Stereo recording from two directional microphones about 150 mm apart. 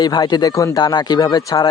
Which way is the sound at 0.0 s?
25° left (ahead or behind).